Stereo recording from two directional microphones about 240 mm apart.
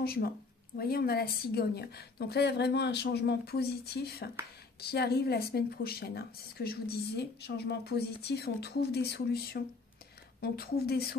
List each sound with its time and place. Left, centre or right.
0.0 s speech: left